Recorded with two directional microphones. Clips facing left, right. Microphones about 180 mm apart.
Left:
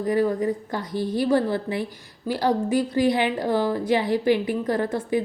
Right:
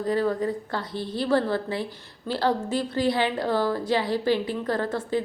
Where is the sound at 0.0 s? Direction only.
20° left (ahead or behind).